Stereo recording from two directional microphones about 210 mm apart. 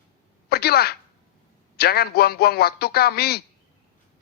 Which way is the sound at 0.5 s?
50° left (ahead or behind).